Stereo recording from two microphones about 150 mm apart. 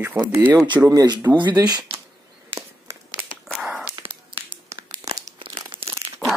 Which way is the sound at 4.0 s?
35° right (ahead or behind).